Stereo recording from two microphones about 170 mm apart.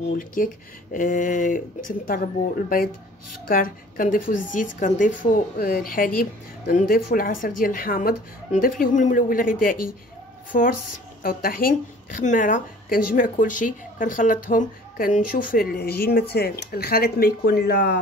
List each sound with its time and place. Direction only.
0.2 s speech: 55° left (ahead or behind); by 17.9 s 75° left (ahead or behind)